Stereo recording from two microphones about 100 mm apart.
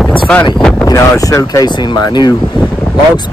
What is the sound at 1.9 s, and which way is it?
Speech, 45° left (ahead or behind).